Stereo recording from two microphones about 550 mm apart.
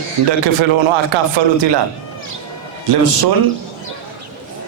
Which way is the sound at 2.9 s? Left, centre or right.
Right.